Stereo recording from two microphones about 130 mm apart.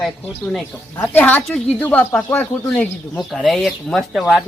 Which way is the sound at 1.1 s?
15° left (ahead or behind).